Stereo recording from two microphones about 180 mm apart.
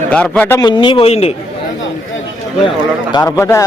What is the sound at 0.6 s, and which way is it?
Speech, 25° left (ahead or behind).